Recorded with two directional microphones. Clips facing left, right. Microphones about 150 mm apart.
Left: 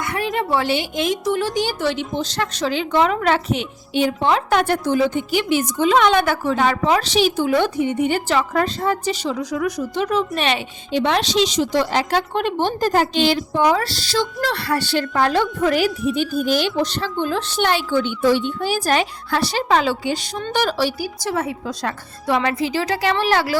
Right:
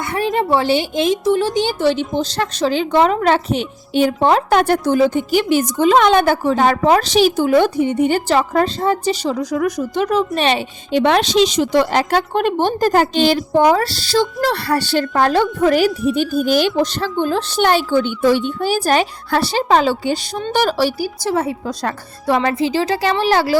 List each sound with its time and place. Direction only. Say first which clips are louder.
0.0 s a woman's voice: right 4 dB; 30° right (ahead or behind)
10.9 s a woman's voice: right 5 dB; 55° right (ahead or behind); by 22.5 s 40° right (ahead or behind)
22.5 s speech: right 4 dB; 30° right (ahead or behind)